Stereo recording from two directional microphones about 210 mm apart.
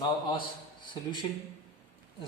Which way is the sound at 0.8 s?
20° left (ahead or behind).